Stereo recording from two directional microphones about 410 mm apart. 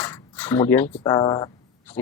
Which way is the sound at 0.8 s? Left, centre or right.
Centre.